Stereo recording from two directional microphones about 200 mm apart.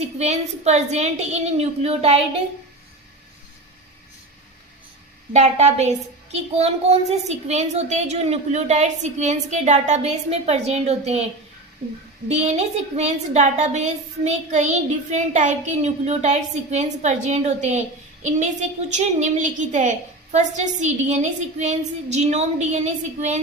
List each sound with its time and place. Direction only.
0.2 s a woman's voice: 35° right (ahead or behind)
5.3 s a woman's voice: 35° right (ahead or behind)
12.3 s a woman's voice: 35° right (ahead or behind)